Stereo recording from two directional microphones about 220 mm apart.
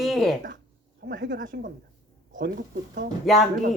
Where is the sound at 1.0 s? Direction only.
40° right (ahead or behind).